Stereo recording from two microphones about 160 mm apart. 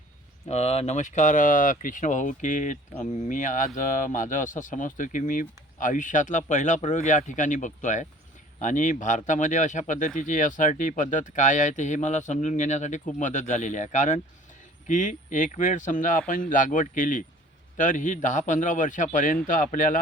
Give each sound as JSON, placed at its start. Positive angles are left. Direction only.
{"t": 0.4, "sound": "speech", "side_deg": 40}